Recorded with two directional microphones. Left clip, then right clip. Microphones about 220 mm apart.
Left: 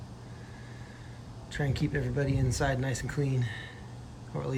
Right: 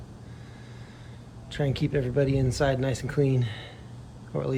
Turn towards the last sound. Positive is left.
turn(degrees=0)  # may be behind; listen again after turning